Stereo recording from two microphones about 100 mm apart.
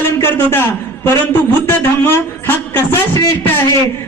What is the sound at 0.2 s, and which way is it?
Speech, 20° left (ahead or behind).